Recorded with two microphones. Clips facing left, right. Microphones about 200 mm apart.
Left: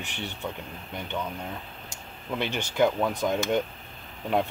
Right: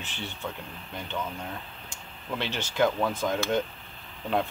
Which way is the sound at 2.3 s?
15° left (ahead or behind).